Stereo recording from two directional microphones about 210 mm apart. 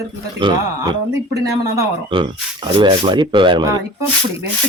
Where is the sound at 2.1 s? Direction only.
25° right (ahead or behind).